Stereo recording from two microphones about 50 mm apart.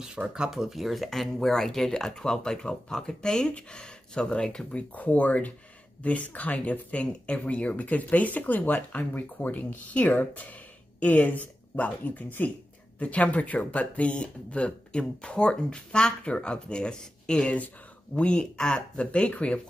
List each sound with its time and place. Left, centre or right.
0.0 s speech: centre
0.5 s speech: centre
4.9 s speech: left